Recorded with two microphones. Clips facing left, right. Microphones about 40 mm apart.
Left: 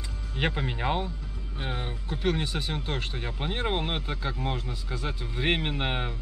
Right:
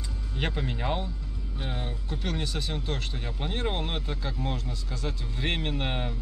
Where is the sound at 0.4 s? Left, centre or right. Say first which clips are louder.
Left 2 dB; centre.